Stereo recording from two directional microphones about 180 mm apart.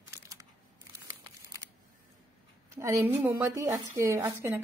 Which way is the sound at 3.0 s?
15° right (ahead or behind).